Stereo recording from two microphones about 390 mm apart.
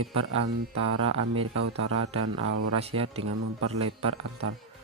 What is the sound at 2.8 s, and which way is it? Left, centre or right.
Speech, centre.